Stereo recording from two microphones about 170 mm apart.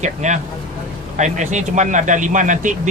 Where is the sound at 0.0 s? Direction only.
45° right (ahead or behind).